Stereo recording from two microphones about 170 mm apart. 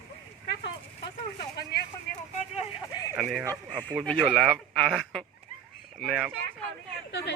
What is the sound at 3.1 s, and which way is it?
Speech, 15° right (ahead or behind).